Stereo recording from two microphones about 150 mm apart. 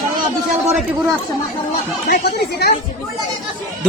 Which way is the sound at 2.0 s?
90° left.